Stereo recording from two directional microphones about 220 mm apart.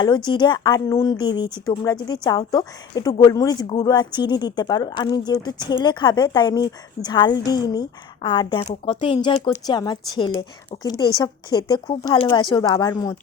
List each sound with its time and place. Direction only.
0.3 s a woman's voice: 20° left (ahead or behind)